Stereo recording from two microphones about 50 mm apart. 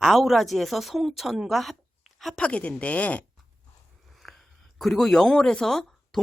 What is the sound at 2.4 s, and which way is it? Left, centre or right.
Speech, left.